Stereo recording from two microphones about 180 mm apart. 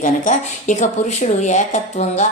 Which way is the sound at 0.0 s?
45° left (ahead or behind).